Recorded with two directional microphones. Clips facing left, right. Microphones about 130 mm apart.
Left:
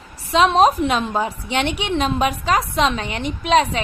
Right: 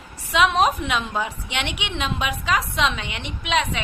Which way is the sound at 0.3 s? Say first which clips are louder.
Left 4 dB; 35° left (ahead or behind).